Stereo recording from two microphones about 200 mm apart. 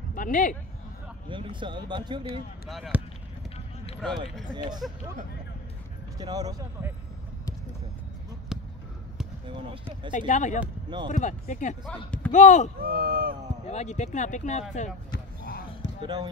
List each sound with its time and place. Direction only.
0.1 s speech: 40° left (ahead or behind)
1.3 s speech: 25° right (ahead or behind)
2.7 s speech: centre (ahead or behind)
4.0 s speech: centre (ahead or behind)
4.6 s speech: 20° right (ahead or behind)
6.1 s speech: 20° right (ahead or behind)
8.5 s basketball bounce: centre (ahead or behind)
9.5 s speech: 25° right (ahead or behind)
10.1 s speech: 40° left (ahead or behind)
12.8 s speech: 50° right (ahead or behind)
13.7 s speech: 35° left (ahead or behind)
15.0 s basketball bounce: 55° left (ahead or behind)
16.0 s speech: 20° right (ahead or behind)